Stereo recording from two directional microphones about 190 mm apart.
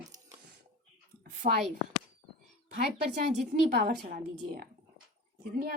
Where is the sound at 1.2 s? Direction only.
55° right (ahead or behind).